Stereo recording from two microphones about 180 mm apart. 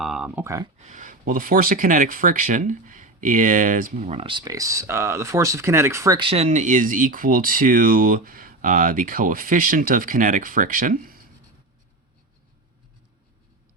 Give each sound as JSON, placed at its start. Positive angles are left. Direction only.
{"t": 0.0, "sound": "a sound", "side_deg": -5}
{"t": 0.4, "sound": "speech", "side_deg": -20}
{"t": 0.8, "sound": "speech", "side_deg": -45}
{"t": 6.1, "sound": "speech", "side_deg": -30}